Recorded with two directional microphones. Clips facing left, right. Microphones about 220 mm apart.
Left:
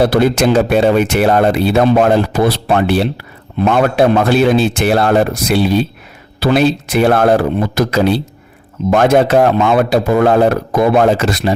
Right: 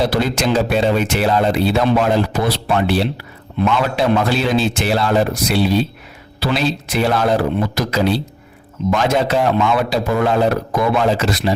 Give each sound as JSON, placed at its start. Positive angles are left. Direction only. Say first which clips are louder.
{"t": 0.0, "sound": "speech", "louder": "left 6 dB", "side_deg": 55}